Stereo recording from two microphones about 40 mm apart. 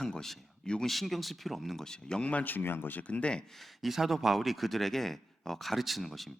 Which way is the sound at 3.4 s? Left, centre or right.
Centre.